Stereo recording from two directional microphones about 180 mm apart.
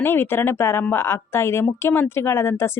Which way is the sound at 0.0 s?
10° left (ahead or behind).